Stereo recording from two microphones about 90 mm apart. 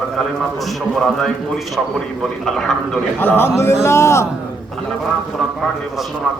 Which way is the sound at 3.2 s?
25° left (ahead or behind).